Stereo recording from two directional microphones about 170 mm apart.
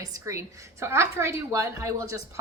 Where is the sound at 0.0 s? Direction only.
20° right (ahead or behind).